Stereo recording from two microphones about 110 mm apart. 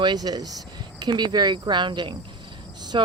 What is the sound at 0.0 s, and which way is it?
Speech, 40° right (ahead or behind).